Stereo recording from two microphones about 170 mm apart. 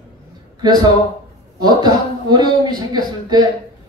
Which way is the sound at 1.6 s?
25° right (ahead or behind).